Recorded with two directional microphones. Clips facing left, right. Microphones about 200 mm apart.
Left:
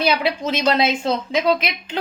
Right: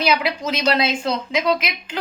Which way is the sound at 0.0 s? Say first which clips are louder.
Left 1 dB; 30° left (ahead or behind).